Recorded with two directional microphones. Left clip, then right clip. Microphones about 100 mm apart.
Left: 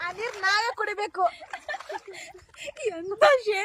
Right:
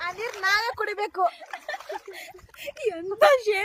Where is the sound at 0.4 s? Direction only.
20° left (ahead or behind).